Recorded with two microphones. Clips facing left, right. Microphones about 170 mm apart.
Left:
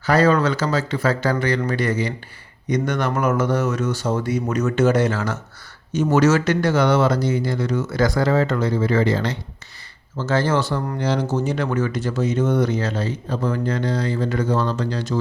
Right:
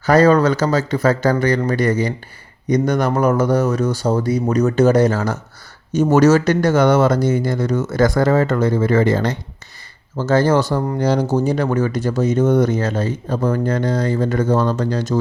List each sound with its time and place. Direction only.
0.0 s speech: 40° right (ahead or behind)